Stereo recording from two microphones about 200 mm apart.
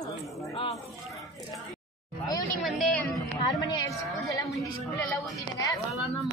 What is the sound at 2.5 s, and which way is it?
Speech, centre (ahead or behind).